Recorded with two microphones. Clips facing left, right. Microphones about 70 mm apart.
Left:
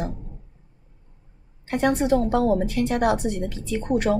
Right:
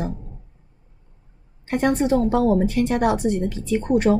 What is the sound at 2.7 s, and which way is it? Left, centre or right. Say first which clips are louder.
Speech: right 2 dB; right.